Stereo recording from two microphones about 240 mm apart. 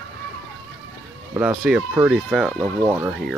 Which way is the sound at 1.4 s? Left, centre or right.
Centre.